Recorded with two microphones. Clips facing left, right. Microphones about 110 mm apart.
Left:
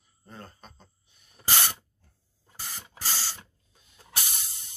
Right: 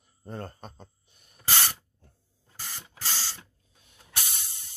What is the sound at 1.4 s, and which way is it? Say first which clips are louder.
Spray: left 1 dB; 20° left (ahead or behind).